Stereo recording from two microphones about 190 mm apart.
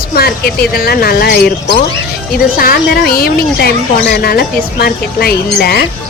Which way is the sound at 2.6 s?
50° left (ahead or behind).